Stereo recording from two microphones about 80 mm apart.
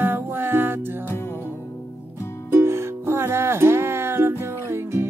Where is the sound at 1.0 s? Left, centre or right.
Left.